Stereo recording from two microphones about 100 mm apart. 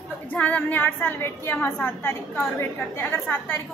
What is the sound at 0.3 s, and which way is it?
A woman's voice, 15° left (ahead or behind).